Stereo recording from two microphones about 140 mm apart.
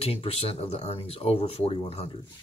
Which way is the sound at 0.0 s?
45° left (ahead or behind).